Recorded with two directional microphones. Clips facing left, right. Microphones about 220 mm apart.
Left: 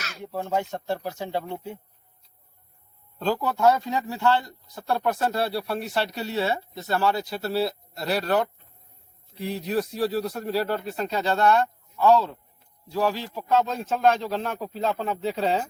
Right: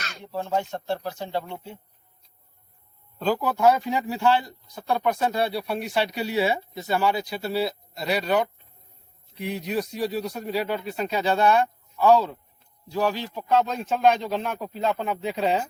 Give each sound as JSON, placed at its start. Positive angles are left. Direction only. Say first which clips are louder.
{"t": 0.0, "sound": "speech", "louder": "even", "side_deg": 5}
{"t": 3.2, "sound": "speech", "louder": "right 1 dB", "side_deg": -5}
{"t": 4.7, "sound": "speech", "louder": "right 1 dB", "side_deg": 0}
{"t": 12.9, "sound": "speech", "louder": "even", "side_deg": 0}